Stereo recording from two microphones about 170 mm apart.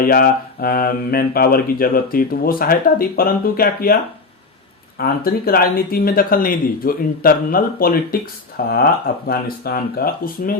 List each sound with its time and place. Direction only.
0.0 s speech: 55° left (ahead or behind)
4.9 s speech: 60° left (ahead or behind)